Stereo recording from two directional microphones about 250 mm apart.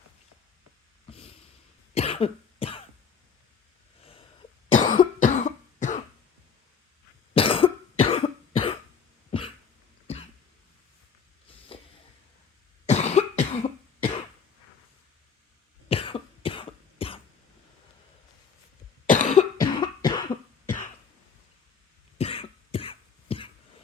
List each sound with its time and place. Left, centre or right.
2.0 s cough: left
4.8 s cough: left
7.3 s cough: left
10.1 s cough: left
12.8 s cough: left
15.9 s cough: left
19.0 s cough: left
19.6 s cough: centre
22.2 s cough: left